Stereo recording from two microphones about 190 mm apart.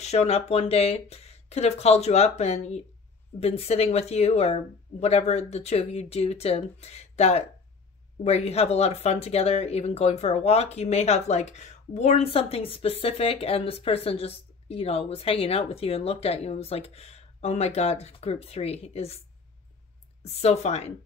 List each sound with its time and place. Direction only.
0.0 s speech: 35° left (ahead or behind)
20.2 s speech: 35° left (ahead or behind)